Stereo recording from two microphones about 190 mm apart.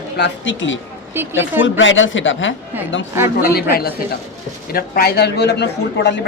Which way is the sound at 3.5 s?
55° left (ahead or behind).